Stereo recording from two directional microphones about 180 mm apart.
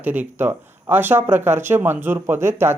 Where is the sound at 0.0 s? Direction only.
10° right (ahead or behind).